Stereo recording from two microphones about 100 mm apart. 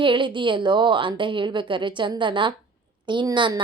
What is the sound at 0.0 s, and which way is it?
A woman's voice, 55° right (ahead or behind).